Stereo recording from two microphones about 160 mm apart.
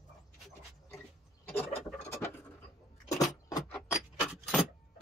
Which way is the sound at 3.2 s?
25° left (ahead or behind).